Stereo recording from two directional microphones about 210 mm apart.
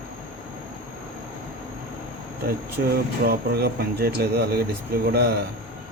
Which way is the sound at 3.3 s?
50° right (ahead or behind).